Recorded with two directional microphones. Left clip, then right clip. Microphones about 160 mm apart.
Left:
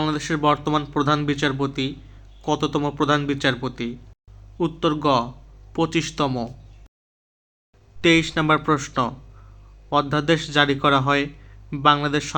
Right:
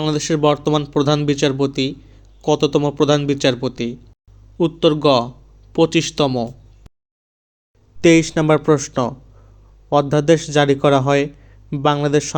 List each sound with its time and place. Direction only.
0.0 s speech: 30° right (ahead or behind)
8.0 s speech: 30° right (ahead or behind)